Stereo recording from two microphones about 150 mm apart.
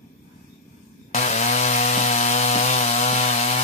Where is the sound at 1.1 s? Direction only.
50° left (ahead or behind).